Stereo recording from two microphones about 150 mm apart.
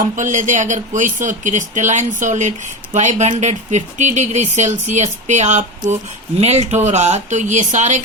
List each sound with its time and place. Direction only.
0.0 s speech: 55° right (ahead or behind)